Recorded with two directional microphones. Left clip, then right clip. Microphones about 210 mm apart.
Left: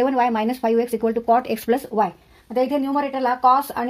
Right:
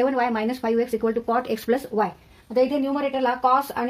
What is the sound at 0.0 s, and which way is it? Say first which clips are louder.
Speech: left 3 dB; 35° left (ahead or behind).